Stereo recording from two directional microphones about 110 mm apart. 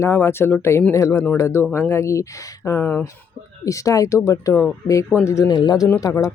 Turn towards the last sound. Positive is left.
turn(degrees=30)  # may be behind; listen again after turning